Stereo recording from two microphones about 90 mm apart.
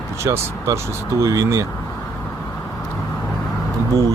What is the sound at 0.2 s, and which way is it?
Speech, 35° right (ahead or behind).